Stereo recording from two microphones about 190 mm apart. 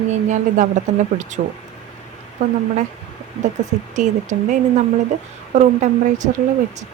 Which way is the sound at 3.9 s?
40° right (ahead or behind).